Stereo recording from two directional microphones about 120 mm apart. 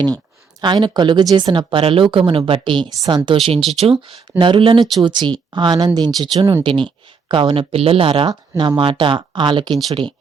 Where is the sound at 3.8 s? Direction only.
55° right (ahead or behind).